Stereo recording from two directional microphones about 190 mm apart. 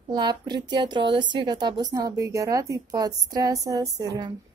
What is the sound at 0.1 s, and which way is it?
A woman's voice, 20° right (ahead or behind).